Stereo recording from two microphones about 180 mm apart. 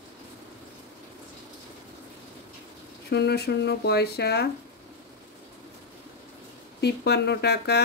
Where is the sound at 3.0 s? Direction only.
65° left (ahead or behind).